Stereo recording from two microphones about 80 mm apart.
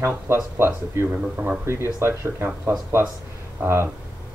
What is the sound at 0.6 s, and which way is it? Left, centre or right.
Speech, right.